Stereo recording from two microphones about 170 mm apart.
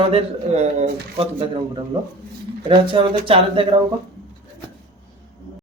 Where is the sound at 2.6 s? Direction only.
30° right (ahead or behind).